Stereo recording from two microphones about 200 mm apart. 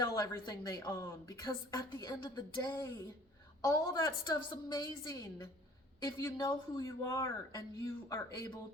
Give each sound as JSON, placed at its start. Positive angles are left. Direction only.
{"t": 0.0, "sound": "a woman's voice", "side_deg": 15}